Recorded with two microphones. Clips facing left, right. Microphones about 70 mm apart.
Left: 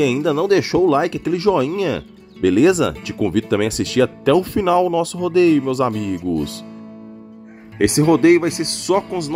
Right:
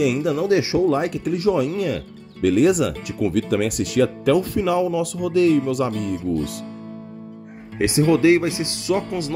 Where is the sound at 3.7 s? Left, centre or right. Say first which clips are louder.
Left 2 dB; left.